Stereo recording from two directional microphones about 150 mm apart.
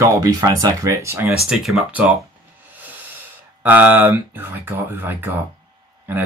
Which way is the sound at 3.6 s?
10° right (ahead or behind).